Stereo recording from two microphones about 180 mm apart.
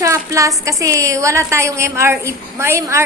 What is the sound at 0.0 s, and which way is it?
A woman's voice, 15° right (ahead or behind).